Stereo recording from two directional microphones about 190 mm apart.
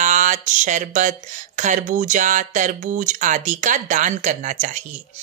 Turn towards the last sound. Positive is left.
turn(degrees=-40)  # may be behind; listen again after turning